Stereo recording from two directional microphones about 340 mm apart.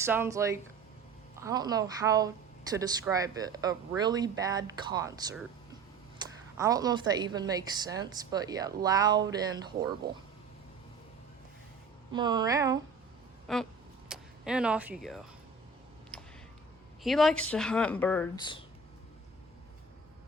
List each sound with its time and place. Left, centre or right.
0.0 s speech: centre
6.2 s a sound: centre
6.6 s speech: centre
10.0 s speech: right
12.1 s speech: centre
13.5 s speech: centre
17.0 s speech: centre